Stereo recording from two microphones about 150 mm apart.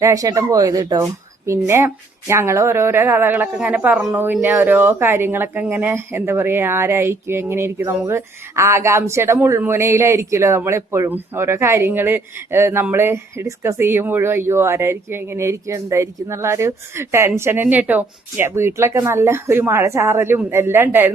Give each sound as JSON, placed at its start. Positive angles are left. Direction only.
{"t": 0.0, "sound": "speech", "side_deg": -20}